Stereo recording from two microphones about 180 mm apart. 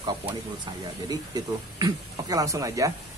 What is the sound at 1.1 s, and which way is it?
Speech, 20° right (ahead or behind).